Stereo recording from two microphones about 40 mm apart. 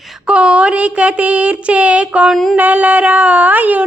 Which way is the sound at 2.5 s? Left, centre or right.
Right.